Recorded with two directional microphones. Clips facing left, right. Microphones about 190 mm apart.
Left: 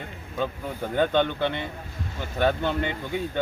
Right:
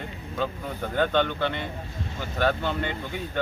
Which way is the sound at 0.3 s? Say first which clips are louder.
Left 1 dB; 15° left (ahead or behind).